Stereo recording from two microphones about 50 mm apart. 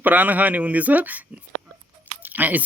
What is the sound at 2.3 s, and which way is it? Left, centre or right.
Speech, right.